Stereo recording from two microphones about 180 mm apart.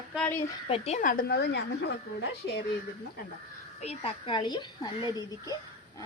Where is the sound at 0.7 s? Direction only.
35° left (ahead or behind); by 2.3 s 70° left (ahead or behind).